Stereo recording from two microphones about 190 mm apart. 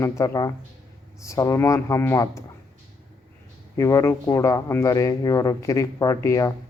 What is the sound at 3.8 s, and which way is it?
Speech, 15° left (ahead or behind).